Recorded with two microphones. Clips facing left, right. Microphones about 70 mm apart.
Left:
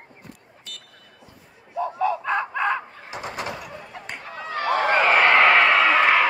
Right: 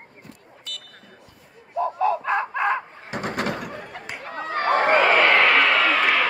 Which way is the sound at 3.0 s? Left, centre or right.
Right.